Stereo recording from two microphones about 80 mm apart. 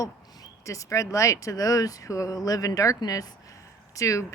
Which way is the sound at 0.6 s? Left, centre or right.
Left.